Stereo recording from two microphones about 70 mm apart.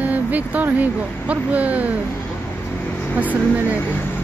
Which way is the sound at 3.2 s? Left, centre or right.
Right.